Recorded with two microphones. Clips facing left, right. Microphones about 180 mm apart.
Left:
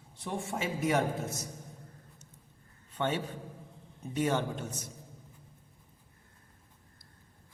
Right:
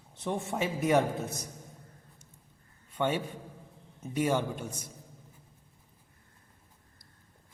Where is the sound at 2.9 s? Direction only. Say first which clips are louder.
Right 2 dB; 10° right (ahead or behind).